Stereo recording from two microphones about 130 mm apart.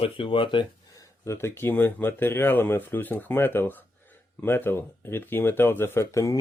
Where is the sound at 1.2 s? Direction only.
20° left (ahead or behind).